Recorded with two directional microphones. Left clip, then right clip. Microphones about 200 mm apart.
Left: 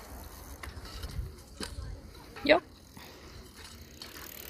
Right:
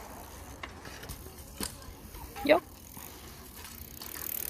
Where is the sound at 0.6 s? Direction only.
40° left (ahead or behind).